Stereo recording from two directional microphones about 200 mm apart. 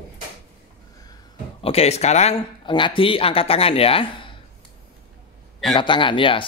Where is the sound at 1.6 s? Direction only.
30° left (ahead or behind).